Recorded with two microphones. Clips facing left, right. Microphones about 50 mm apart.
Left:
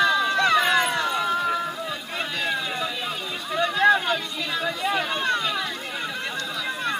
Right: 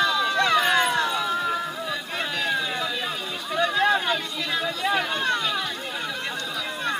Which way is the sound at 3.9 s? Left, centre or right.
Right.